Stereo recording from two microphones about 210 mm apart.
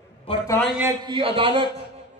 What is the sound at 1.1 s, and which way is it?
Speech, 25° right (ahead or behind).